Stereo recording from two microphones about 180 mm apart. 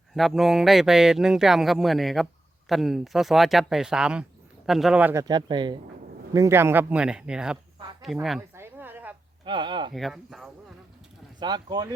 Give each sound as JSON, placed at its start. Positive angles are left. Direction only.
{"t": 0.1, "sound": "speech", "side_deg": 0}
{"t": 5.2, "sound": "speech", "side_deg": -25}
{"t": 8.5, "sound": "a sound", "side_deg": -10}
{"t": 9.4, "sound": "speech", "side_deg": -25}
{"t": 9.9, "sound": "speech", "side_deg": 0}
{"t": 11.3, "sound": "speech", "side_deg": -25}